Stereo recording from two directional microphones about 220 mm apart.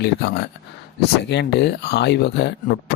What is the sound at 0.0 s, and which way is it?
Speech, 50° left (ahead or behind).